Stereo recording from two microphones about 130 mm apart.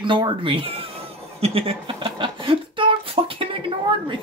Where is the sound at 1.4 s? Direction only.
45° right (ahead or behind).